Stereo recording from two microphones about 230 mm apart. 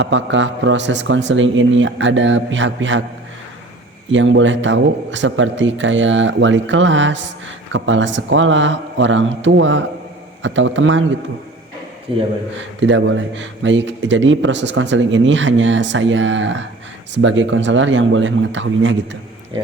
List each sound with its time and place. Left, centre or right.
0.0 s speech: right
4.1 s a man's voice: right
12.1 s speech: right
12.8 s a man's voice: right